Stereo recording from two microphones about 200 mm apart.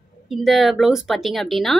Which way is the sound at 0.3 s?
Centre (ahead or behind).